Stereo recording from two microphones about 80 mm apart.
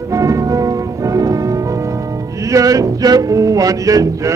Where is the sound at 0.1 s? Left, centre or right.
Right.